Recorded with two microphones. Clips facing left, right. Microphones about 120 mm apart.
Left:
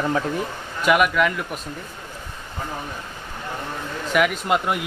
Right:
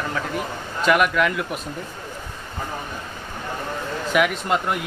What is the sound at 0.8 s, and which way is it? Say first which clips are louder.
Speech: even; 5° left (ahead or behind).